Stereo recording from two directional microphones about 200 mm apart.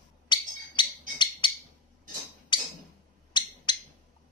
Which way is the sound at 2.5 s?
25° left (ahead or behind).